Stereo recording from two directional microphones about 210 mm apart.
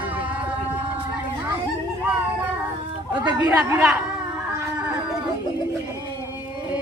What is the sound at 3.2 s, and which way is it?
Speech, 20° right (ahead or behind).